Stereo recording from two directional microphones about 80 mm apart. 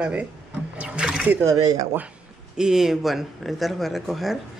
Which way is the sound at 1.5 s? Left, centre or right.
Right.